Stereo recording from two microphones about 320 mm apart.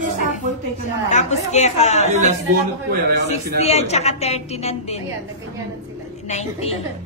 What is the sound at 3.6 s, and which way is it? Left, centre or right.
Speech, centre.